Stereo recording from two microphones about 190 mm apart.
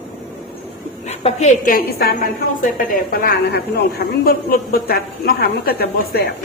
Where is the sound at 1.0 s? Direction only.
35° left (ahead or behind).